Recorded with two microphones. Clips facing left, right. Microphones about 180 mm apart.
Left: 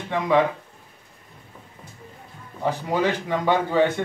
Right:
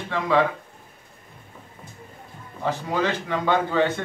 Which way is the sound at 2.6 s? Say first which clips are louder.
Left 2 dB; 15° left (ahead or behind).